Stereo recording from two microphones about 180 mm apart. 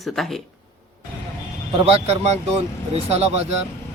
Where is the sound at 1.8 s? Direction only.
35° right (ahead or behind).